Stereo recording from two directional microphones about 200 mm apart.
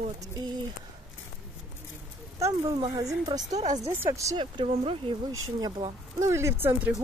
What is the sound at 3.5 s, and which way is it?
Speech, 35° right (ahead or behind).